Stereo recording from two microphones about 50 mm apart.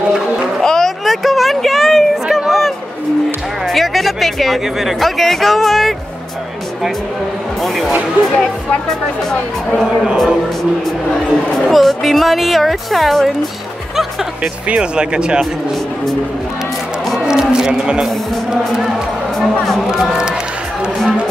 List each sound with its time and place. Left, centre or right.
0.6 s a sound: centre
3.6 s speech: centre
7.6 s music: centre
11.5 s a woman's voice: centre
14.7 s speech: centre
17.3 s speech: centre
19.3 s a woman's voice: centre
20.0 s speech: centre